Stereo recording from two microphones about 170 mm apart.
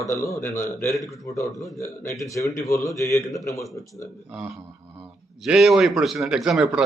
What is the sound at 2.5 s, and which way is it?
A man's voice, 20° left (ahead or behind).